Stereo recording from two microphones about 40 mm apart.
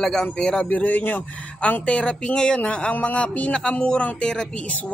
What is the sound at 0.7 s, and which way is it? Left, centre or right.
Speech, left.